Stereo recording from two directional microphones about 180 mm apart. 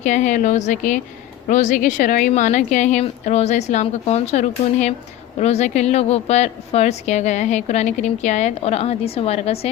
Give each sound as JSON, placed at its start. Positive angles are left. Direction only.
{"t": 0.0, "sound": "a woman's voice", "side_deg": 45}